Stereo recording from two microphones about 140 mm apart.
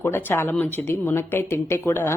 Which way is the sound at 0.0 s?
15° left (ahead or behind).